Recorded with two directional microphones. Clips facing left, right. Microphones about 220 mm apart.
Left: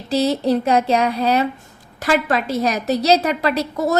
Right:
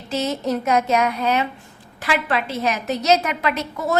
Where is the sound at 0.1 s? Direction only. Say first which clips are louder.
Left 5 dB; 35° left (ahead or behind).